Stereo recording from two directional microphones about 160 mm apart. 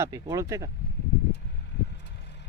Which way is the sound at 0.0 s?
20° right (ahead or behind).